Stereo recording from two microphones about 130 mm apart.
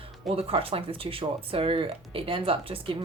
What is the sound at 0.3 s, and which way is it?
Speech, 50° right (ahead or behind).